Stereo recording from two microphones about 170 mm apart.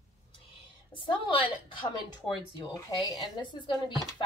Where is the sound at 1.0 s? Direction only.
30° left (ahead or behind).